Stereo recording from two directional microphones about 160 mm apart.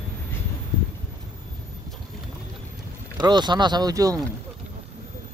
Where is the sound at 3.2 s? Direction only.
25° right (ahead or behind).